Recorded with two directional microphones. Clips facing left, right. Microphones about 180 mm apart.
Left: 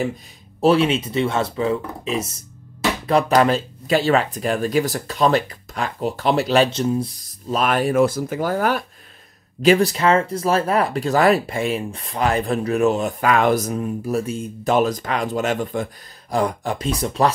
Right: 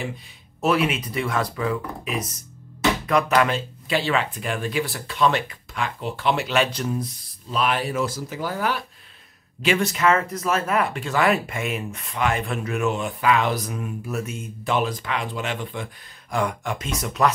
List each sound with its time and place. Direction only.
0.6 s speech: 30° left (ahead or behind)
7.2 s speech: 45° left (ahead or behind)